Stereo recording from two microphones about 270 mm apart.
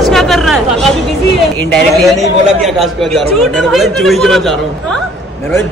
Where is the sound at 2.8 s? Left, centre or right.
Centre.